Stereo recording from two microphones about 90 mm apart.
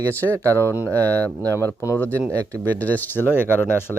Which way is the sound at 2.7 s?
20° left (ahead or behind).